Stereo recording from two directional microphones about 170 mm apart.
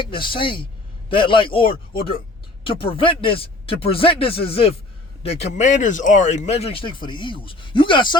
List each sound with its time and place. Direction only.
0.0 s speech: 30° left (ahead or behind)